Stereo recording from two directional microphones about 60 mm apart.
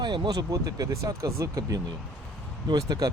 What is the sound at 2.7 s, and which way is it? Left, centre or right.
Speech, right.